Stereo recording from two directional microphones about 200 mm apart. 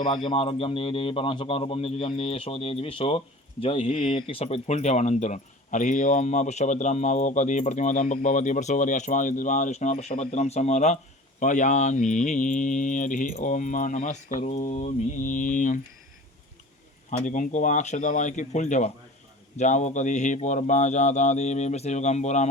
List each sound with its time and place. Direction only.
0.0 s speech: 25° left (ahead or behind); by 15.8 s 40° left (ahead or behind)
17.1 s speech: 40° left (ahead or behind)